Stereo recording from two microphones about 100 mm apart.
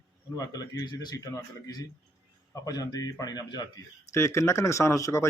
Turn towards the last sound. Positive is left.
turn(degrees=30)  # may be behind; listen again after turning